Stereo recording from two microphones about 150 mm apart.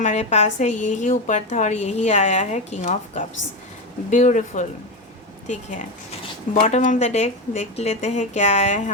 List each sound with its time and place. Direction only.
0.0 s a woman's voice: 50° left (ahead or behind)